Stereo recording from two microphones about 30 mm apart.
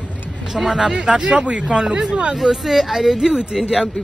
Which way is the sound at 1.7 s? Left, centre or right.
Right.